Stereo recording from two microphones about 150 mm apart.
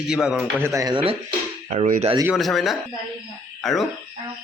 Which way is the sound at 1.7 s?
60° right (ahead or behind).